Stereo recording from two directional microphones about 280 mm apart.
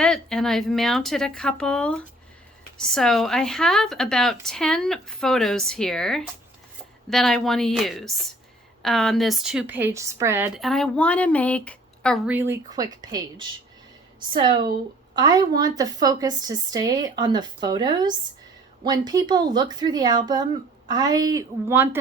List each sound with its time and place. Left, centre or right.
0.0 s a woman's voice: centre